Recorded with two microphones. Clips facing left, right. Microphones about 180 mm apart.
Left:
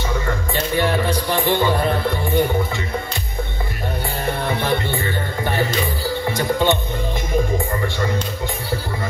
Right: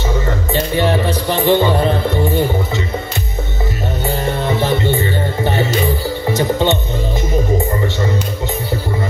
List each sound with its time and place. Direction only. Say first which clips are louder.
0.7 s speech: right 2 dB; 20° right (ahead or behind)
5.4 s music: right 4 dB; 25° right (ahead or behind)